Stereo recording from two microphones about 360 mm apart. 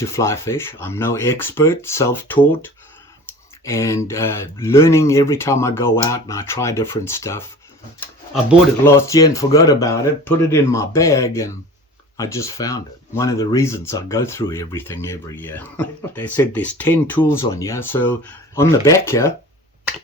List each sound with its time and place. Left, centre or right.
0.0 s speech: centre